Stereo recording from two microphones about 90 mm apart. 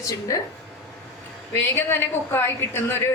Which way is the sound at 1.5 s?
25° left (ahead or behind).